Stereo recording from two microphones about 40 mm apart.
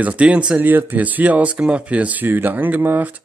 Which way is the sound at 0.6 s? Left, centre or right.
Right.